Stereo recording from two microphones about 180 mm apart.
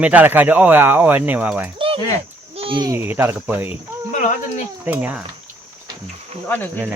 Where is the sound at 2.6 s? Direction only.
25° right (ahead or behind).